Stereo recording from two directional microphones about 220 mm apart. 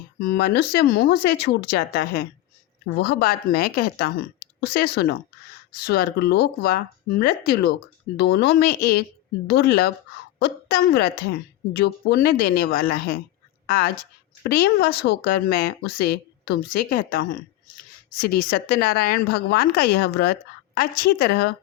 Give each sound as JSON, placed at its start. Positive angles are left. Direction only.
{"t": 0.2, "sound": "a woman's voice", "side_deg": 45}